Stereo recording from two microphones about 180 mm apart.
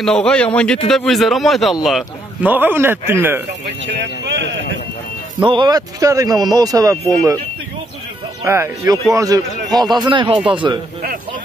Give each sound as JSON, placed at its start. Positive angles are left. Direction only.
{"t": 0.0, "sound": "a man's voice", "side_deg": 5}
{"t": 3.8, "sound": "speech", "side_deg": -85}
{"t": 5.4, "sound": "speech", "side_deg": -25}
{"t": 8.5, "sound": "speech", "side_deg": -15}